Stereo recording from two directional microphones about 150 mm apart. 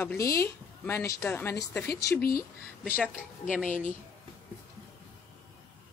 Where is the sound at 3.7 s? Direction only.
60° left (ahead or behind).